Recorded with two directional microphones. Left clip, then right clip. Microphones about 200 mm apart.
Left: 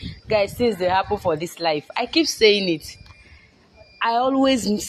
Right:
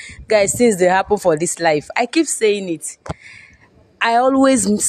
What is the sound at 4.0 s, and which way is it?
Speech, 60° right (ahead or behind).